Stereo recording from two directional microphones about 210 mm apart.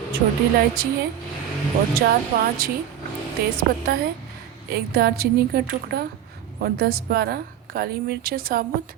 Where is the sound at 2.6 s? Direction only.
45° right (ahead or behind).